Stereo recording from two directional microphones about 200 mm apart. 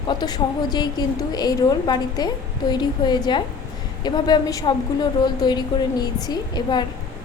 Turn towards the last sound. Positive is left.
turn(degrees=20)  # may be behind; listen again after turning